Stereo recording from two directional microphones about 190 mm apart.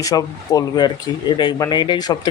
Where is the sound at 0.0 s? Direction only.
20° left (ahead or behind).